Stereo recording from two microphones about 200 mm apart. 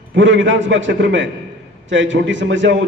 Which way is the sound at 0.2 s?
65° right (ahead or behind).